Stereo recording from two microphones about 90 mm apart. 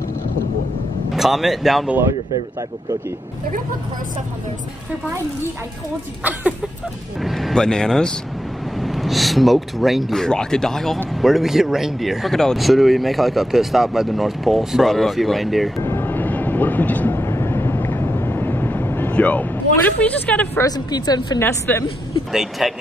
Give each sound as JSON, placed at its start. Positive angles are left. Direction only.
{"t": 1.1, "sound": "speech", "side_deg": 0}
{"t": 7.2, "sound": "speech", "side_deg": 0}
{"t": 15.8, "sound": "train", "side_deg": 25}
{"t": 20.6, "sound": "speech", "side_deg": 45}
{"t": 21.4, "sound": "a woman's voice", "side_deg": 25}
{"t": 22.3, "sound": "speech", "side_deg": -5}